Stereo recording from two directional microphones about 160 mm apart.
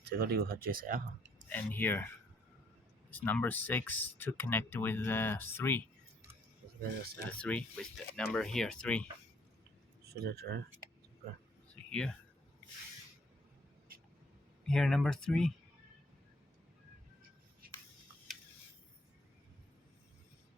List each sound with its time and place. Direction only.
0.0 s speech: 75° right (ahead or behind); by 1.0 s 60° right (ahead or behind)
1.5 s speech: 10° left (ahead or behind)
7.3 s speech: 10° left (ahead or behind)
10.0 s speech: 85° right
11.9 s speech: 5° left (ahead or behind)
14.7 s speech: 5° left (ahead or behind)